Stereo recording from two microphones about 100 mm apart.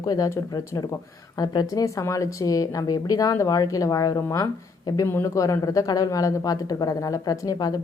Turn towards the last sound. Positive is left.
turn(degrees=35)  # may be behind; listen again after turning